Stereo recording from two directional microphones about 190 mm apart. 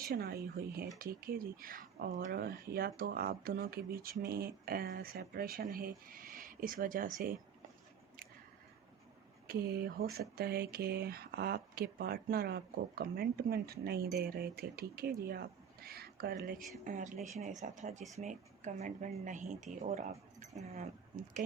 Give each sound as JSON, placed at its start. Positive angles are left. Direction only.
{"t": 0.0, "sound": "speech", "side_deg": -50}
{"t": 9.5, "sound": "speech", "side_deg": -55}